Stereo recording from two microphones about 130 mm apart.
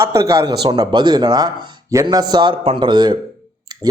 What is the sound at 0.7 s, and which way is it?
A man's voice, 35° right (ahead or behind).